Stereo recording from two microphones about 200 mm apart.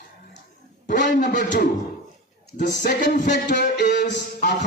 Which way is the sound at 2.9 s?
55° left (ahead or behind).